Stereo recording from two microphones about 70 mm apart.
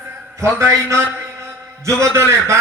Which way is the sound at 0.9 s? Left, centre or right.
Right.